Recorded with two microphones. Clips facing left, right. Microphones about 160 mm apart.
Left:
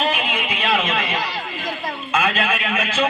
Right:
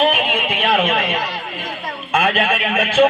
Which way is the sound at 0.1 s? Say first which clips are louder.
Right 4 dB; 55° right (ahead or behind).